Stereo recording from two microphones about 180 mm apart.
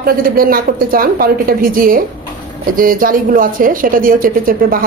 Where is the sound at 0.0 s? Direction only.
55° right (ahead or behind).